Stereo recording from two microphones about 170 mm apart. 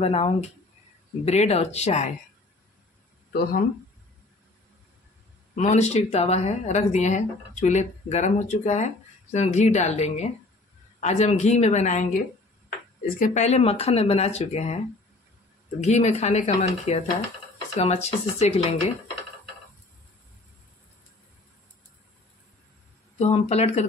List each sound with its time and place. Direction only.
0.0 s speech: 35° left (ahead or behind)
5.6 s speech: 40° left (ahead or behind)
13.2 s speech: 45° left (ahead or behind)
15.8 s speech: 40° left (ahead or behind)
23.1 s speech: 40° left (ahead or behind)